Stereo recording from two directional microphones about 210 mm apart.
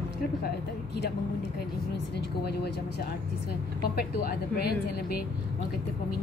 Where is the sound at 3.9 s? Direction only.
50° left (ahead or behind).